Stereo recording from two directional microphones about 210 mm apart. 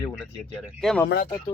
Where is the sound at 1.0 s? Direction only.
45° left (ahead or behind).